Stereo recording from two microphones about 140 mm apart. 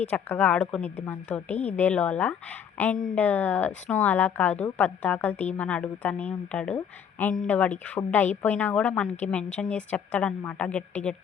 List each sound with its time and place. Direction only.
0.1 s a woman's voice: 10° left (ahead or behind)